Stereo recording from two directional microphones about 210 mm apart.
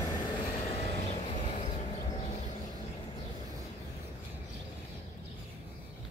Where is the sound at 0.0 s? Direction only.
20° left (ahead or behind).